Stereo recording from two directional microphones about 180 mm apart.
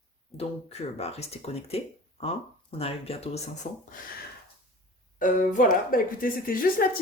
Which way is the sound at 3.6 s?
45° left (ahead or behind).